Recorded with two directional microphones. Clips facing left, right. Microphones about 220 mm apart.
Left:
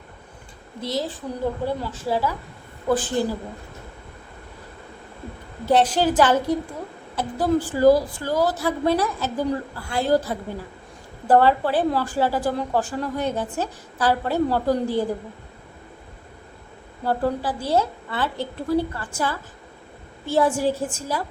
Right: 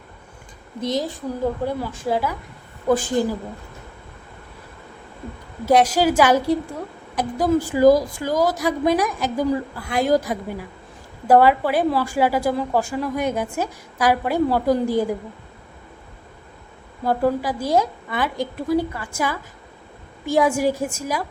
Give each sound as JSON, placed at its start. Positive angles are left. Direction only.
{"t": 0.8, "sound": "a woman's voice", "side_deg": -20}
{"t": 5.6, "sound": "a woman's voice", "side_deg": -10}
{"t": 17.0, "sound": "a woman's voice", "side_deg": -10}